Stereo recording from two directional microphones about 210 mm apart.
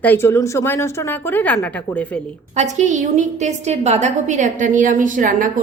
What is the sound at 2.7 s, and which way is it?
A woman's voice, 35° right (ahead or behind).